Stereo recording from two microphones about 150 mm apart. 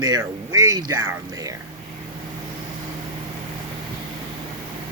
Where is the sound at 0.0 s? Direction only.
25° right (ahead or behind).